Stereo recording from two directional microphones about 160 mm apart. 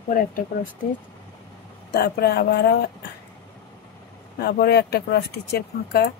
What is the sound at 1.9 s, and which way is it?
Speech, 85° left.